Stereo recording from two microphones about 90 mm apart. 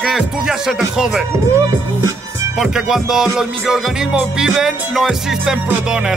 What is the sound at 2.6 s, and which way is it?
Speech, 5° right (ahead or behind).